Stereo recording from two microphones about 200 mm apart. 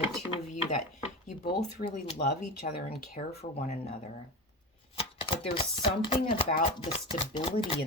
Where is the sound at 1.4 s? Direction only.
25° left (ahead or behind).